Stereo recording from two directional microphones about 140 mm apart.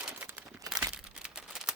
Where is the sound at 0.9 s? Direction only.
5° right (ahead or behind).